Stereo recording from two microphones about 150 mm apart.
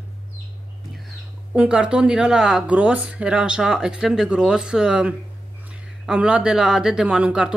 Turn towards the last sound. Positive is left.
turn(degrees=-5)  # may be behind; listen again after turning